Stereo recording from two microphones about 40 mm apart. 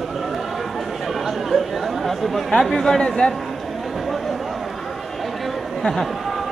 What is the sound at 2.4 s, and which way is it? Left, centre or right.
Speech, centre.